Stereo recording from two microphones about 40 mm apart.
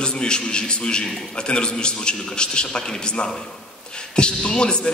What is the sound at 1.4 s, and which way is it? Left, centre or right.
A man's voice, left.